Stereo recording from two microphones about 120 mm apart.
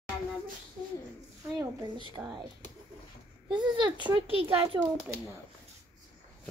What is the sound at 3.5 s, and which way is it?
A child's voice, 40° right (ahead or behind).